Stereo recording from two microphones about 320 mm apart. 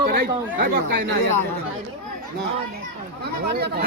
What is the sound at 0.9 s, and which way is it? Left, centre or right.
Speech, right.